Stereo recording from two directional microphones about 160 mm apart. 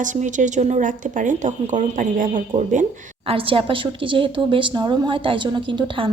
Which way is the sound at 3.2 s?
35° right (ahead or behind).